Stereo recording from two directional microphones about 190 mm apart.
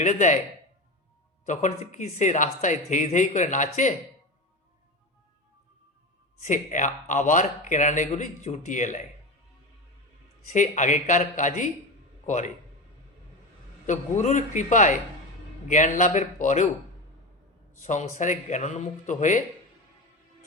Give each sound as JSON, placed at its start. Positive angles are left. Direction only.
{"t": 0.0, "sound": "a man's voice", "side_deg": 40}
{"t": 1.5, "sound": "a man's voice", "side_deg": 40}
{"t": 6.4, "sound": "a man's voice", "side_deg": 40}
{"t": 10.5, "sound": "a man's voice", "side_deg": 40}
{"t": 13.8, "sound": "a man's voice", "side_deg": 40}
{"t": 17.7, "sound": "a man's voice", "side_deg": 40}